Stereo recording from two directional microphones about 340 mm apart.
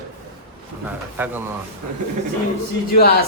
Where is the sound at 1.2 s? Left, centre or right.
Centre.